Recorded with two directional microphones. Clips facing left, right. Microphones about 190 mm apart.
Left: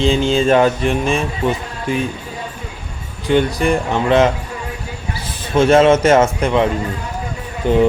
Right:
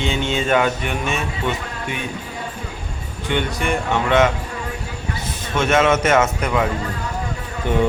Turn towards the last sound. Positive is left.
turn(degrees=30)  # may be behind; listen again after turning